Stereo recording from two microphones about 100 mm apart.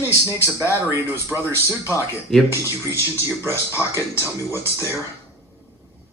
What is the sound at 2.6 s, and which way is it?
Speech, 30° left (ahead or behind).